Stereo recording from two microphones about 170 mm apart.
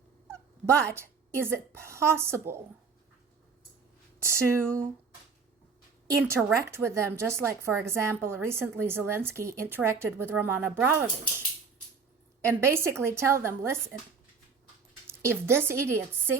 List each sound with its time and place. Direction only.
0.9 s speech: 15° right (ahead or behind)
4.2 s speech: 15° right (ahead or behind)
6.2 s speech: 15° right (ahead or behind)
15.0 s speech: 15° right (ahead or behind)